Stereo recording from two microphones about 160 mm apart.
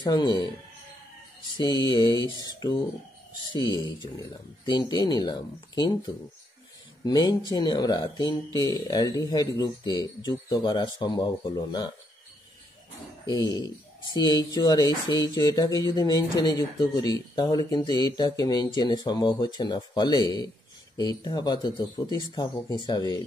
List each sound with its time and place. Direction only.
0.0 s speech: 25° left (ahead or behind)
1.6 s speech: 25° left (ahead or behind)
13.3 s speech: 25° left (ahead or behind)